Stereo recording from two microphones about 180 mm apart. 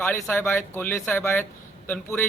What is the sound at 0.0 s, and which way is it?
Speech, 5° left (ahead or behind).